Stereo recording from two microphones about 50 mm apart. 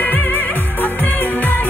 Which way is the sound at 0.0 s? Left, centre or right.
Left.